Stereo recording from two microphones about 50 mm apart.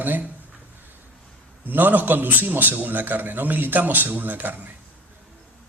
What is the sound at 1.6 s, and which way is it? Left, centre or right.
Speech, right.